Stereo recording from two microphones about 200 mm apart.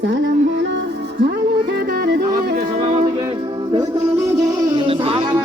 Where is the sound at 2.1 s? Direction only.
50° right (ahead or behind).